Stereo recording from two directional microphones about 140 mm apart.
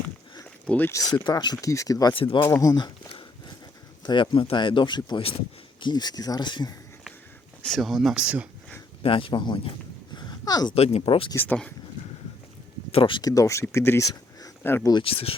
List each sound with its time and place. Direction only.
0.7 s speech: 15° left (ahead or behind)
2.1 s speech: 40° left (ahead or behind)
2.4 s a sound: 20° left (ahead or behind)
4.0 s speech: 35° left (ahead or behind)
7.6 s speech: centre (ahead or behind)
9.0 s speech: 40° left (ahead or behind)
10.2 s a sound: 30° left (ahead or behind)
10.8 s speech: 45° left (ahead or behind)
11.3 s speech: 10° left (ahead or behind)
12.9 s speech: 35° left (ahead or behind); by 14.8 s 15° left (ahead or behind)
15.0 s speech: 40° left (ahead or behind)